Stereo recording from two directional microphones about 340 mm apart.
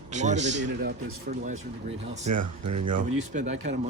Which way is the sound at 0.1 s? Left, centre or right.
Right.